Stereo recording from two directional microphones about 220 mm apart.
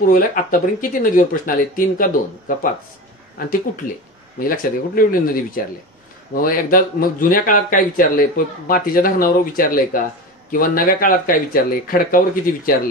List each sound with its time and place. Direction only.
0.0 s speech: 40° left (ahead or behind)